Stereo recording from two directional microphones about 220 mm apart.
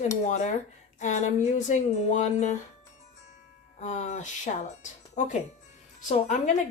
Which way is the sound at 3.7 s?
30° left (ahead or behind).